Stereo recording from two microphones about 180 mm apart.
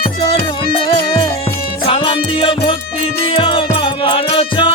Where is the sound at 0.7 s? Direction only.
25° left (ahead or behind).